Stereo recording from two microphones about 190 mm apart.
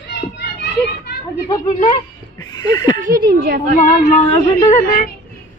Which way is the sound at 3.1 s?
55° right (ahead or behind).